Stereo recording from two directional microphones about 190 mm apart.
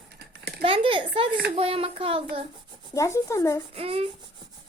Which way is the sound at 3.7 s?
30° right (ahead or behind).